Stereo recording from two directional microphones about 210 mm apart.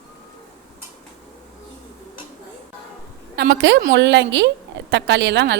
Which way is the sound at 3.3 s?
55° right (ahead or behind).